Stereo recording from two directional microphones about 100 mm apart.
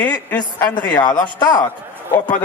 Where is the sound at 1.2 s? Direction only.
45° left (ahead or behind).